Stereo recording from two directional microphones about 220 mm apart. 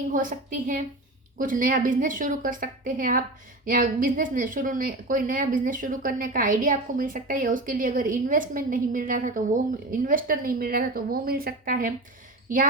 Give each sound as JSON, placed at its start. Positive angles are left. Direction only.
{"t": 0.1, "sound": "a woman's voice", "side_deg": -40}